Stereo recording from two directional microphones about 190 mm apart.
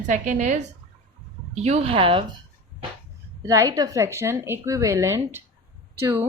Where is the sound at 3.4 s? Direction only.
15° right (ahead or behind).